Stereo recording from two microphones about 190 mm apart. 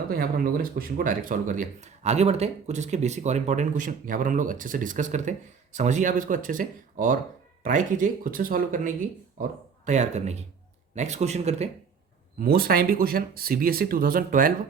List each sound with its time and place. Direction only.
0.1 s speech: 50° right (ahead or behind)
12.4 s speech: 50° right (ahead or behind)